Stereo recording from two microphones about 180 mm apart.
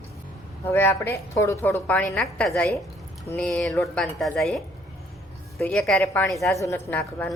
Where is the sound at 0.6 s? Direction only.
10° left (ahead or behind).